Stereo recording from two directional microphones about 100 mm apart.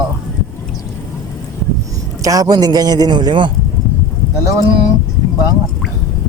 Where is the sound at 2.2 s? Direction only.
35° right (ahead or behind).